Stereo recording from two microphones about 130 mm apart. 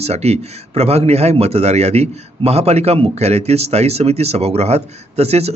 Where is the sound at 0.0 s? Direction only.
55° right (ahead or behind).